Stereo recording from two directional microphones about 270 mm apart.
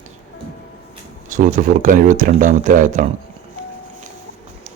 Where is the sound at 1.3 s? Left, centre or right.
Right.